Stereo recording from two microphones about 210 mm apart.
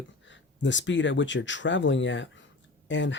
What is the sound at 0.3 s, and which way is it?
Speech, 60° left (ahead or behind).